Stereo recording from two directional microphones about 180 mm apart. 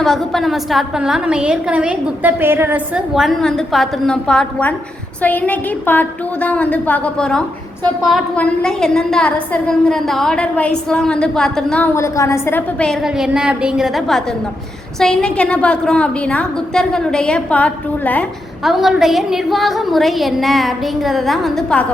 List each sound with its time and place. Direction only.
0.0 s a woman's voice: centre (ahead or behind)
11.9 s a woman's voice: 15° left (ahead or behind)